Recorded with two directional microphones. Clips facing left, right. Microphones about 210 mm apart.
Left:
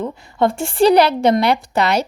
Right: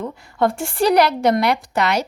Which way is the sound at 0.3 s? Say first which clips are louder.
Left 3 dB; 25° left (ahead or behind).